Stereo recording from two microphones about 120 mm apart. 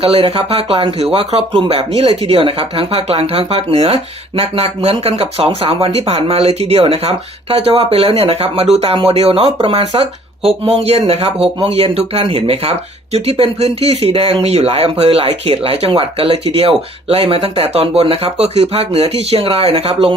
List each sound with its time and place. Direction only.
0.0 s speech: 55° right (ahead or behind)
18.4 s speech: 60° right (ahead or behind)